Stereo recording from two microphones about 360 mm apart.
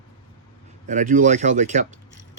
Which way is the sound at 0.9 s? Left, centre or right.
Right.